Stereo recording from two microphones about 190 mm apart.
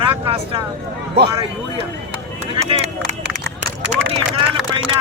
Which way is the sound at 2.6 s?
35° right (ahead or behind).